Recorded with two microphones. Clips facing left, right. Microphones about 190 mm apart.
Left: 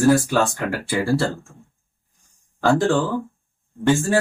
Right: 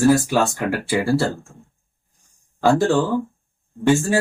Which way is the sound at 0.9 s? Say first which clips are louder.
Right 1 dB; 5° right (ahead or behind).